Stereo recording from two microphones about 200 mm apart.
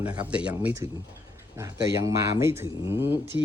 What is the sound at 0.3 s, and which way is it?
Speech, 5° right (ahead or behind).